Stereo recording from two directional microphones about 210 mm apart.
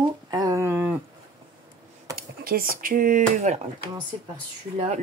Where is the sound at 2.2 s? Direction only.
45° right (ahead or behind).